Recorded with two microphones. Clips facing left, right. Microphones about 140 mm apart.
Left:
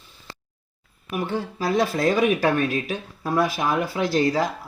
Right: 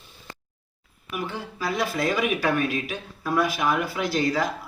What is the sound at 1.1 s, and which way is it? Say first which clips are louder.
Speech: left 5 dB; 40° left (ahead or behind).